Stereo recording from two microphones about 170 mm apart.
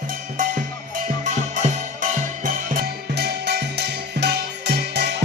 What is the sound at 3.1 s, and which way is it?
Music, 75° right (ahead or behind).